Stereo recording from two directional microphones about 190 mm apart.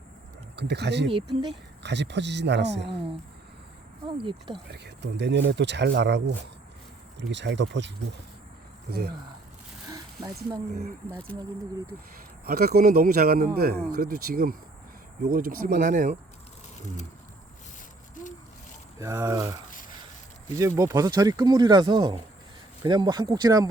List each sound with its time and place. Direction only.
0.5 s speech: 65° right (ahead or behind)
4.0 s speech: 25° right (ahead or behind)
4.7 s speech: 65° right (ahead or behind)
8.9 s speech: 55° right (ahead or behind)
12.5 s speech: 55° right (ahead or behind)
18.2 s owl: 40° left (ahead or behind)
18.9 s speech: 15° right (ahead or behind)
20.6 s speech: 15° right (ahead or behind)